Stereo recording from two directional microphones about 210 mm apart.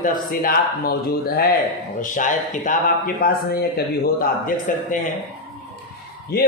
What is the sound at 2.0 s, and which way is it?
Speech, 40° left (ahead or behind).